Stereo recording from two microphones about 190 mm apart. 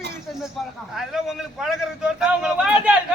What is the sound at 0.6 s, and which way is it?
A man's voice, centre (ahead or behind).